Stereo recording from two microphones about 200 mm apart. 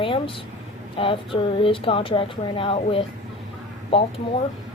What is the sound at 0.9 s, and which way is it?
Speech, 25° left (ahead or behind).